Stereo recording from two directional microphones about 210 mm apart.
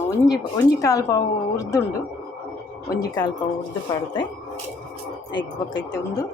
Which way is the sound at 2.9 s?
15° left (ahead or behind).